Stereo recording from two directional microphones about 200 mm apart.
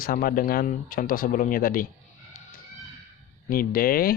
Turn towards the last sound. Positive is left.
turn(degrees=45)  # may be behind; listen again after turning